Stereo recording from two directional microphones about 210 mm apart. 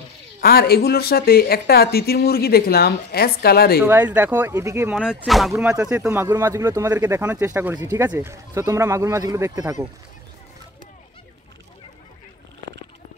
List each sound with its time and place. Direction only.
0.4 s speech: 45° left (ahead or behind)
3.8 s speech: 10° right (ahead or behind)
5.5 s speech: 15° right (ahead or behind)